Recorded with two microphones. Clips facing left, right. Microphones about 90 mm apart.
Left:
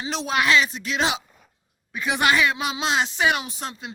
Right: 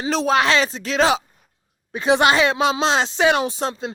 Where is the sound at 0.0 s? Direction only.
40° right (ahead or behind).